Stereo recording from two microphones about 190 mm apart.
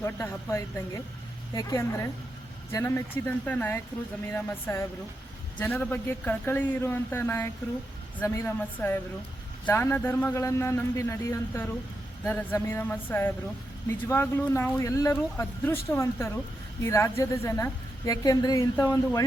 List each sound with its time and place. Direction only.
0.0 s a woman's voice: 15° left (ahead or behind)